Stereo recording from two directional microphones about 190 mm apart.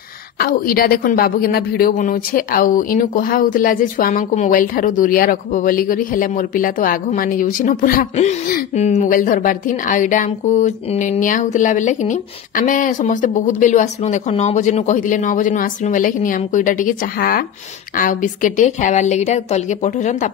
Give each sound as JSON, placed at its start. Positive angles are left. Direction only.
{"t": 0.4, "sound": "a woman's voice", "side_deg": 50}